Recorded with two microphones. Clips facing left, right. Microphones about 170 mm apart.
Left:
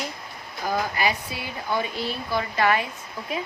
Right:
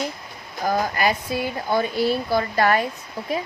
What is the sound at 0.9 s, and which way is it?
Speech, 45° right (ahead or behind).